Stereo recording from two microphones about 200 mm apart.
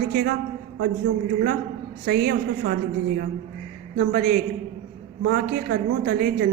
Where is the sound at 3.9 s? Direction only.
50° right (ahead or behind).